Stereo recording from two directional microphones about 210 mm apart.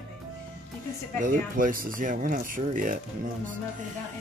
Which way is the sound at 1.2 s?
40° right (ahead or behind).